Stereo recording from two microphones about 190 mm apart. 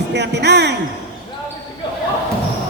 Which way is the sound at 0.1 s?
60° right (ahead or behind).